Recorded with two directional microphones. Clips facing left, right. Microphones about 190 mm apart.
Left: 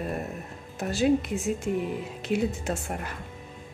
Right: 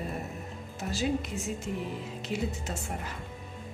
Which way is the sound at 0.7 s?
55° left (ahead or behind).